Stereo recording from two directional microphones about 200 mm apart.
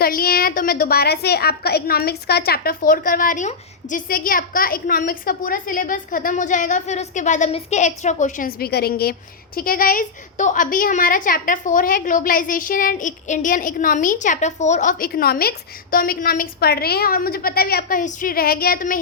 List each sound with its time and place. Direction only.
0.0 s a woman's voice: 50° left (ahead or behind)